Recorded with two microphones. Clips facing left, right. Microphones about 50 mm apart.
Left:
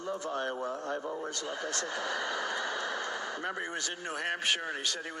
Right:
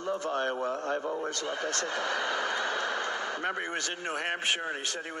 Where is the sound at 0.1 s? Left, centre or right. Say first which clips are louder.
Right 4 dB; right.